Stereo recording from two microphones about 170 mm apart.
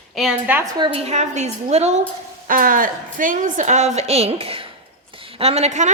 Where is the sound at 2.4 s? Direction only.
55° right (ahead or behind).